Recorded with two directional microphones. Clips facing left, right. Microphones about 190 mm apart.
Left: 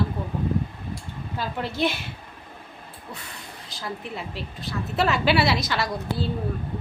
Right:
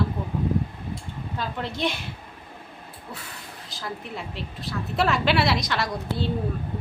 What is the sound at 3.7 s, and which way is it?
A woman's voice, centre (ahead or behind).